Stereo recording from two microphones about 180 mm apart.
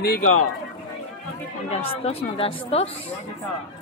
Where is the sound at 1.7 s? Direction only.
35° left (ahead or behind).